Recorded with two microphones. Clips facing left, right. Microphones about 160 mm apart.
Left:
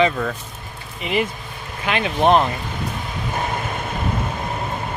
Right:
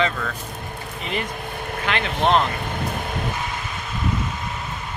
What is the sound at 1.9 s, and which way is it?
Speech, 15° left (ahead or behind).